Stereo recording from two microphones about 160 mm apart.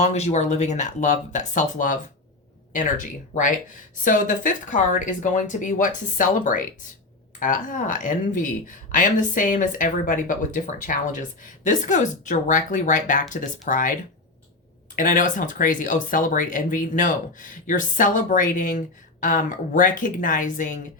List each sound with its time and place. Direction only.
0.0 s speech: 45° left (ahead or behind)